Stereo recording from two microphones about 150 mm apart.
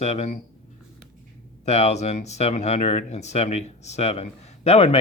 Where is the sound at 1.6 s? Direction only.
45° left (ahead or behind).